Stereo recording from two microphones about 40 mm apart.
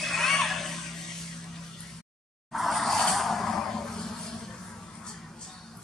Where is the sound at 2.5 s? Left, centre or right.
Centre.